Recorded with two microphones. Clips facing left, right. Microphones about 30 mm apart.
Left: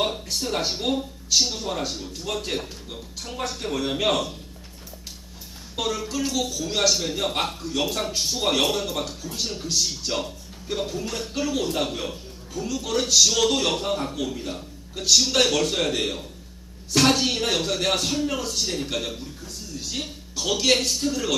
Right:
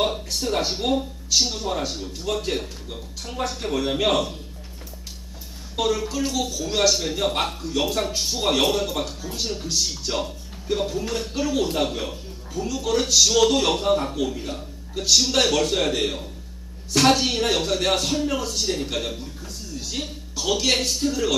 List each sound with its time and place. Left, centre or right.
0.0 s a man's voice: centre
5.7 s a man's voice: centre